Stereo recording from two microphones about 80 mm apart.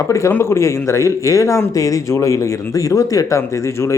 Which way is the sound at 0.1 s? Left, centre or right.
Left.